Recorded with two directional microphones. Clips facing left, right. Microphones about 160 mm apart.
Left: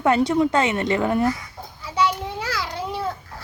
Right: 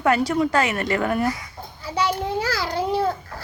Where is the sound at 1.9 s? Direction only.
35° right (ahead or behind).